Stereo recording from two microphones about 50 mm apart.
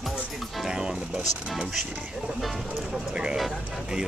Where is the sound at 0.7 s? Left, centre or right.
Centre.